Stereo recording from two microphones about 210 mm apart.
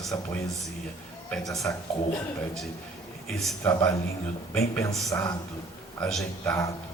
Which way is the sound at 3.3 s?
Centre (ahead or behind).